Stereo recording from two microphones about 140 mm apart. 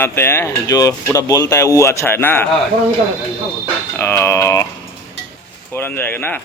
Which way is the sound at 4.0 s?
15° left (ahead or behind).